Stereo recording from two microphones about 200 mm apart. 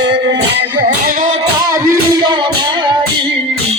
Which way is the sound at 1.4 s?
15° right (ahead or behind).